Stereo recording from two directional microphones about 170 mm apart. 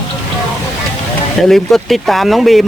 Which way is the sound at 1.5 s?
Centre (ahead or behind).